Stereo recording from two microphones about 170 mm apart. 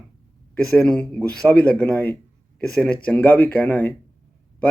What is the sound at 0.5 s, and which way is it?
Speech, 5° left (ahead or behind).